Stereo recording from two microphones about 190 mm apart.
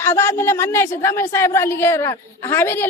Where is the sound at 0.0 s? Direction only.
10° left (ahead or behind).